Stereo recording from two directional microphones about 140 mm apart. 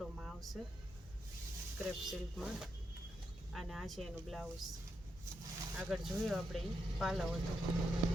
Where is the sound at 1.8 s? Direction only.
5° right (ahead or behind).